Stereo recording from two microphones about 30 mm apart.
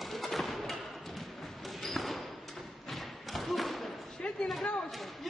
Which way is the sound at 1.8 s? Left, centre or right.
Centre.